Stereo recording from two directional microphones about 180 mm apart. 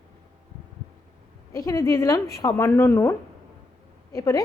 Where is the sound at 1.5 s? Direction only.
20° left (ahead or behind).